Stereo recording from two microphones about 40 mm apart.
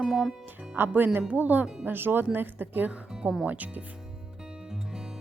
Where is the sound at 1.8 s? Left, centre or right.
Right.